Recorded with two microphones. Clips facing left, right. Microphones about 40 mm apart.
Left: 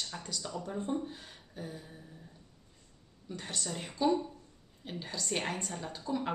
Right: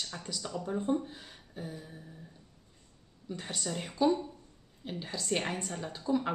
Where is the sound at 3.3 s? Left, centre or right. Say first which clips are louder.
Right 2 dB; centre.